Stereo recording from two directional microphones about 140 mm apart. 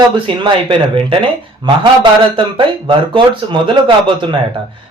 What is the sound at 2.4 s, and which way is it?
Speech, 35° right (ahead or behind).